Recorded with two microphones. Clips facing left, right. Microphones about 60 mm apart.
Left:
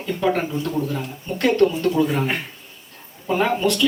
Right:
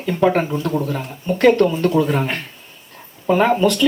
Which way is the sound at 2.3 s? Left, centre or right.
Centre.